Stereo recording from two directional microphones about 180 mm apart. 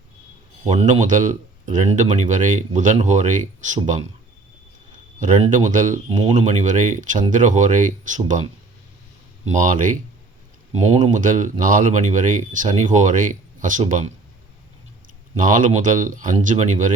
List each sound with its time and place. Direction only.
0.7 s speech: 40° right (ahead or behind)
5.2 s speech: 45° right (ahead or behind)
6.1 s speech: 30° right (ahead or behind)
6.4 s speech: 40° right (ahead or behind)
9.5 s speech: 45° right (ahead or behind)
15.4 s speech: 45° right (ahead or behind)